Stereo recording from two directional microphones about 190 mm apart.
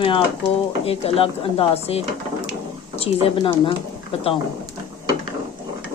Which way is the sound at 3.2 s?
25° left (ahead or behind).